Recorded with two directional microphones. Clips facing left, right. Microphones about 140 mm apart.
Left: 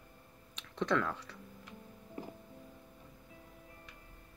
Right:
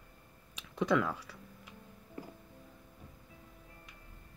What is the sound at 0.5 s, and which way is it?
Speech, 5° right (ahead or behind).